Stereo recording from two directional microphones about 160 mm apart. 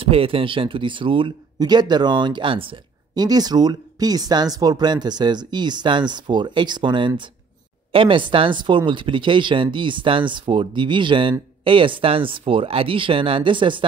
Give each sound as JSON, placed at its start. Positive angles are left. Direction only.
{"t": 0.0, "sound": "speech", "side_deg": -35}